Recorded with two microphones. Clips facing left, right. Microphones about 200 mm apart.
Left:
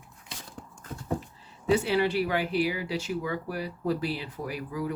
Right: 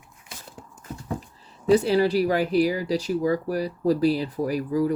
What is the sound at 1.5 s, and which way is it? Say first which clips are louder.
Speech: right 6 dB; 40° right (ahead or behind).